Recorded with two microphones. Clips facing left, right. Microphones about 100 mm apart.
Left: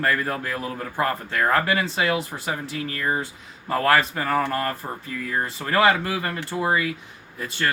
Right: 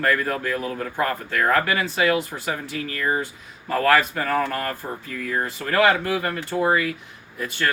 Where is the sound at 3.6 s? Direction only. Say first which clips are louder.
Right 1 dB; 30° left (ahead or behind).